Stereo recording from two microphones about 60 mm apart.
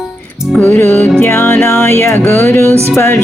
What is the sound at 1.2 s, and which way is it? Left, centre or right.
Music, left.